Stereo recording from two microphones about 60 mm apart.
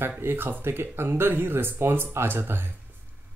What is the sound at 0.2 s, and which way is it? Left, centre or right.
Speech, right.